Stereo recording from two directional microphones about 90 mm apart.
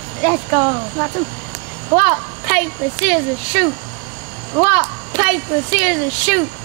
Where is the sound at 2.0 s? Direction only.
15° right (ahead or behind).